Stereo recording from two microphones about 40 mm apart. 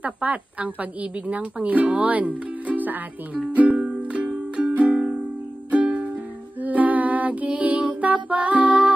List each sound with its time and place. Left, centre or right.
0.0 s a woman's voice: right
3.5 s music: right
6.6 s music: right
7.4 s mantra: right
8.0 s music: right